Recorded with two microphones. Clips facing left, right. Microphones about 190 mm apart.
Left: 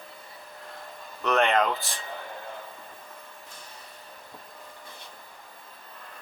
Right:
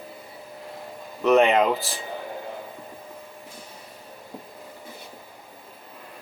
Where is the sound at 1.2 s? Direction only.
5° right (ahead or behind).